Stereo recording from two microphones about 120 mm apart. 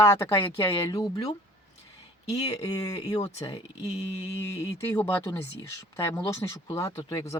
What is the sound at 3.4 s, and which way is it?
Speech, 60° left (ahead or behind).